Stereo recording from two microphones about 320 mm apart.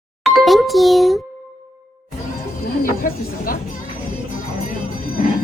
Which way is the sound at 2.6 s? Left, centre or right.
Left.